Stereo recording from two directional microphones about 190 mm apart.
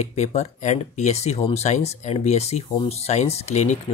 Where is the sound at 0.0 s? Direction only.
35° left (ahead or behind).